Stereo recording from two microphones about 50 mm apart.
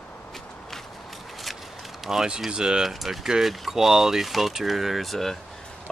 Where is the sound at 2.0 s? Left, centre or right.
Centre.